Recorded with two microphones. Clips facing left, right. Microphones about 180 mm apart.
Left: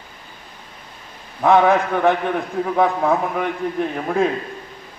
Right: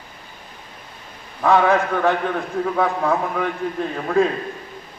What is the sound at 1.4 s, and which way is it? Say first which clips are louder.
A man's voice: left 2 dB; 15° left (ahead or behind).